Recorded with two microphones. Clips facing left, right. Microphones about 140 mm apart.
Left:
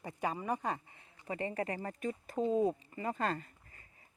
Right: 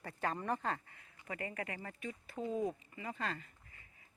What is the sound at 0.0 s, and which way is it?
Speech, 15° left (ahead or behind).